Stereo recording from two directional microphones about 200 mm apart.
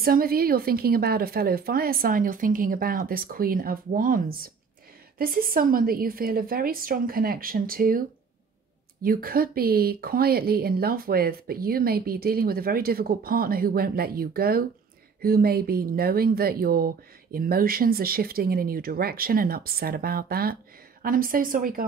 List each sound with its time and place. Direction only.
0.0 s speech: 45° right (ahead or behind)
9.0 s speech: 45° right (ahead or behind)